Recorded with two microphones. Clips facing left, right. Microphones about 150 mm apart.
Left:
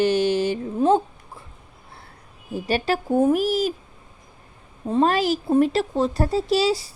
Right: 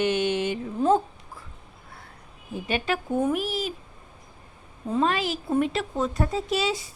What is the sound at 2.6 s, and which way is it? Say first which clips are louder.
Speech: left 4 dB; 35° left (ahead or behind).